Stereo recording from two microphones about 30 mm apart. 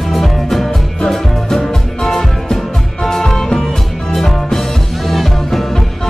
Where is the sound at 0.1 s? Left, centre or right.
Centre.